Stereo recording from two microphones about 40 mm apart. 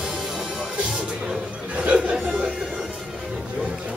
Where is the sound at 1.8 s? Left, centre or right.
Right.